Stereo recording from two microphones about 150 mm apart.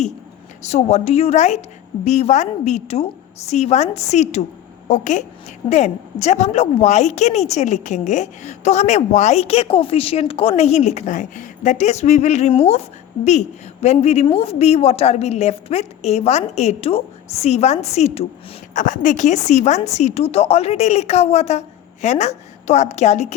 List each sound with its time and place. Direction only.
0.6 s a woman's voice: 50° left (ahead or behind)
18.7 s a woman's voice: 55° left (ahead or behind)